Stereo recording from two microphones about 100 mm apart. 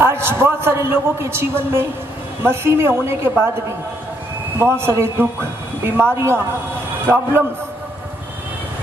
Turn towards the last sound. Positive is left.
turn(degrees=-20)  # may be behind; listen again after turning